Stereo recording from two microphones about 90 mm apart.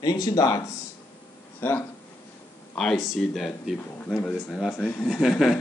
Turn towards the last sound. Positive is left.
turn(degrees=-5)  # may be behind; listen again after turning